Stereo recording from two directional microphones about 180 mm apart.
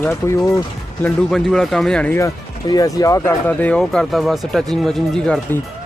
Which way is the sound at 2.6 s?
20° left (ahead or behind).